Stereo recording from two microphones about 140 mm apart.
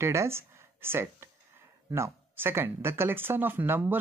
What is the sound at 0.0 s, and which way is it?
Speech, 20° right (ahead or behind).